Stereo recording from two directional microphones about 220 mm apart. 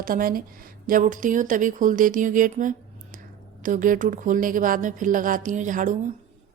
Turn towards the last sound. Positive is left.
turn(degrees=-35)  # may be behind; listen again after turning